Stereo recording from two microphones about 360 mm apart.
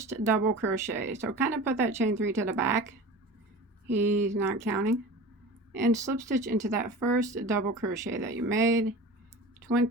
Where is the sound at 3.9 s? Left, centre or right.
Centre.